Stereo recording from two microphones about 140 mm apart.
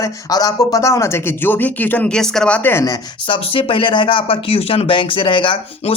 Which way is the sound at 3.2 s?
40° left (ahead or behind).